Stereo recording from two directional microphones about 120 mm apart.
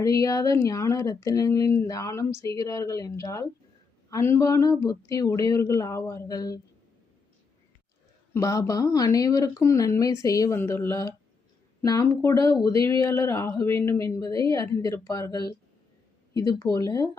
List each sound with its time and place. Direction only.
0.0 s speech: 30° left (ahead or behind)
8.3 s speech: 30° left (ahead or behind)